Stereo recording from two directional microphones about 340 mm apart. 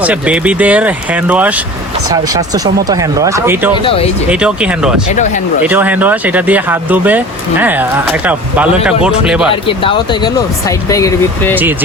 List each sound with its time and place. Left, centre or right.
0.0 s speech: centre
5.1 s speech: left
5.6 s speech: centre
9.8 s speech: centre